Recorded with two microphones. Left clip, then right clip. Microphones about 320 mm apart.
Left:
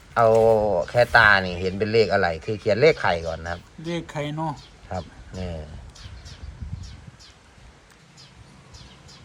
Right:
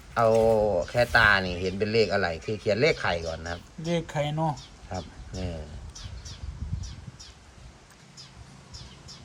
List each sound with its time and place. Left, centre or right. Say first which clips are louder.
0.1 s speech: left 5 dB; centre
3.8 s speech: right 1 dB; right
4.9 s speech: left 5 dB; centre